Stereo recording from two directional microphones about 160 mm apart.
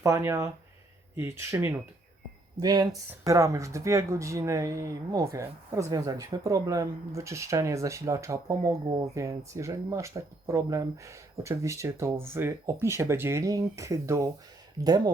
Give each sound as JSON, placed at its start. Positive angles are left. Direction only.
{"t": 0.0, "sound": "speech", "side_deg": -20}